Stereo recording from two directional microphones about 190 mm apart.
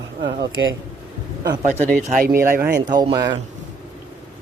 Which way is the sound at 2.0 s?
45° right (ahead or behind).